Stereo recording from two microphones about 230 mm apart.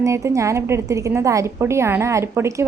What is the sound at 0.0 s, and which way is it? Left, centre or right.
A woman's voice, centre.